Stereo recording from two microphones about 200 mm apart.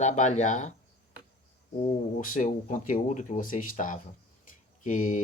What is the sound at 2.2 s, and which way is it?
Speech, 40° left (ahead or behind).